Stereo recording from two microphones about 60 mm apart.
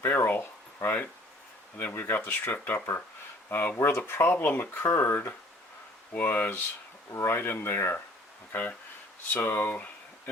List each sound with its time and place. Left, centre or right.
0.0 s speech: left
3.8 s speech: left
7.1 s speech: left
9.3 s speech: left